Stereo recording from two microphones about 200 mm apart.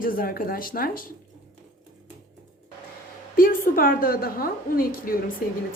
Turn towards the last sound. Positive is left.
turn(degrees=50)  # may be behind; listen again after turning